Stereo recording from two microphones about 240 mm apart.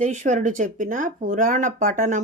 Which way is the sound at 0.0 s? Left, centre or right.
Right.